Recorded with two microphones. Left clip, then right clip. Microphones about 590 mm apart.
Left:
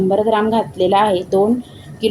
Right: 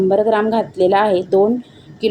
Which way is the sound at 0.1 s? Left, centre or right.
Left.